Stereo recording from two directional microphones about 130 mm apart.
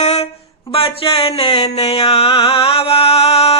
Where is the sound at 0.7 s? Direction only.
45° left (ahead or behind).